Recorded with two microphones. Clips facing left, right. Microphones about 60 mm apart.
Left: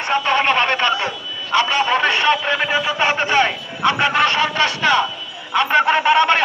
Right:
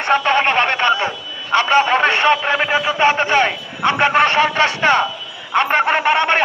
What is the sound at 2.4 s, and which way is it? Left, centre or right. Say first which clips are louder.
A man's voice: right 2 dB; centre.